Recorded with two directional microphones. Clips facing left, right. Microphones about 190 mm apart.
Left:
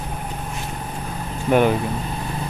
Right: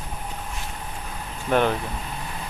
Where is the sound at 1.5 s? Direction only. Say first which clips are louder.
Left 4 dB; 10° left (ahead or behind).